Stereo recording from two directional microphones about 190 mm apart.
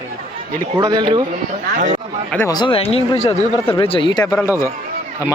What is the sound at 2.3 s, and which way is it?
Speech, 15° left (ahead or behind).